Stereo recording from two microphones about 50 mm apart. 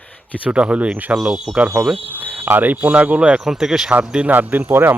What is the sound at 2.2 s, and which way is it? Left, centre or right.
Speech, right.